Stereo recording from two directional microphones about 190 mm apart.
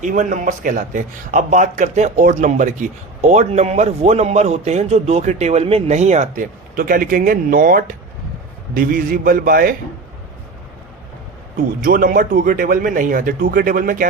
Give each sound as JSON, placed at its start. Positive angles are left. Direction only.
{"t": 0.0, "sound": "a man's voice", "side_deg": -40}
{"t": 11.8, "sound": "speech", "side_deg": -45}